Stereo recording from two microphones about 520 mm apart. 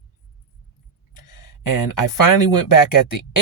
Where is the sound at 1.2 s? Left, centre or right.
Left.